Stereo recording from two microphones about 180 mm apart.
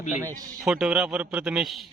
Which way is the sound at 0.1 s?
15° right (ahead or behind).